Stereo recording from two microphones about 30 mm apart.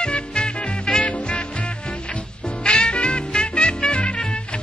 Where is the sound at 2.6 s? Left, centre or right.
Left.